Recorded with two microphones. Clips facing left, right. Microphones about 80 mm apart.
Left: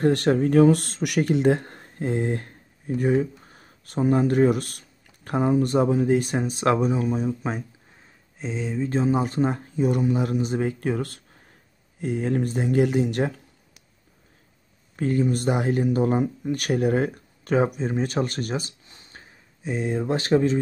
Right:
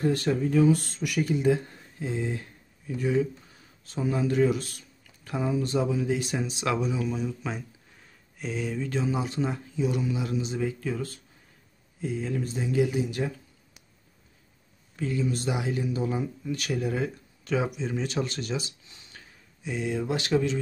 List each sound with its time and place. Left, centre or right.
0.0 s speech: left
8.4 s speech: left
15.0 s speech: left